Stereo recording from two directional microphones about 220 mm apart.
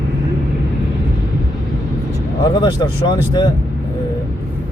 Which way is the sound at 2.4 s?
20° left (ahead or behind).